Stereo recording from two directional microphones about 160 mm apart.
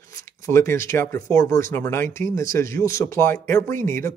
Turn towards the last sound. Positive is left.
turn(degrees=15)  # may be behind; listen again after turning